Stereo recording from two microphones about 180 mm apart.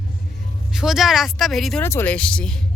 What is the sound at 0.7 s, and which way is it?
Speech, centre (ahead or behind).